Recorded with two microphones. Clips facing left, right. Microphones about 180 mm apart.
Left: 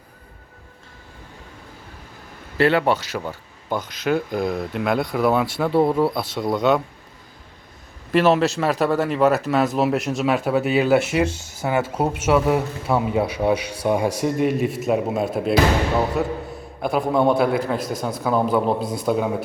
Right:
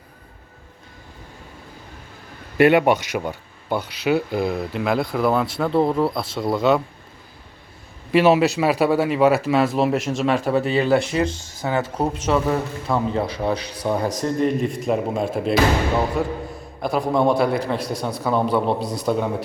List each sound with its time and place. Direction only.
2.6 s speech: 15° right (ahead or behind)
8.1 s speech: 5° right (ahead or behind)
9.4 s speech: 5° left (ahead or behind)